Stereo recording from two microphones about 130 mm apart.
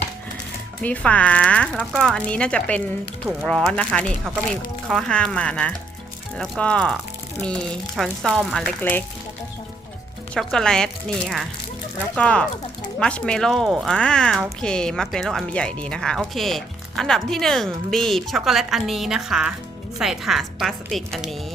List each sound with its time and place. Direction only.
0.8 s speech: 10° left (ahead or behind)
8.8 s speech: 15° left (ahead or behind)
10.3 s speech: 5° left (ahead or behind)